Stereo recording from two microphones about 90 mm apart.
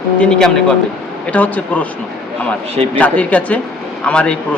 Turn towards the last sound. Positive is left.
turn(degrees=10)  # may be behind; listen again after turning